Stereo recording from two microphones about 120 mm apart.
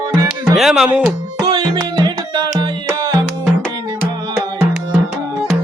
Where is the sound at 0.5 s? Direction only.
5° right (ahead or behind).